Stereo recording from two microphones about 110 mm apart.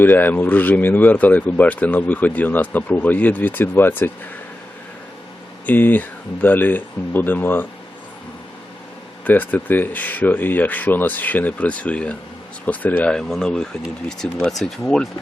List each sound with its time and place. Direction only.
0.0 s speech: 15° left (ahead or behind)
5.6 s speech: 15° left (ahead or behind)
9.2 s speech: 15° left (ahead or behind)